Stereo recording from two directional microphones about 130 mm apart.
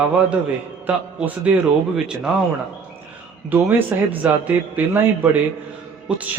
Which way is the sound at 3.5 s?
15° right (ahead or behind).